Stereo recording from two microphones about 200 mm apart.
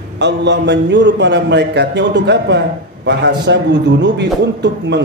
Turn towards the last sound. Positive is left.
turn(degrees=-60)  # may be behind; listen again after turning